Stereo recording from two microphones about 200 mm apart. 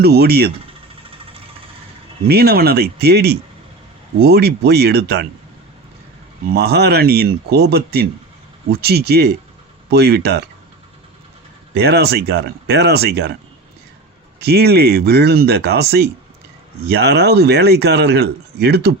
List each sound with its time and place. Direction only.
0.0 s speech: 50° right (ahead or behind)
2.2 s speech: 50° right (ahead or behind)
6.5 s speech: 55° right (ahead or behind)
11.7 s speech: 55° right (ahead or behind)
14.3 s speech: 55° right (ahead or behind)